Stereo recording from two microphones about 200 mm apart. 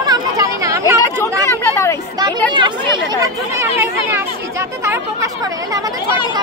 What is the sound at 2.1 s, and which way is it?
Speech, 20° right (ahead or behind).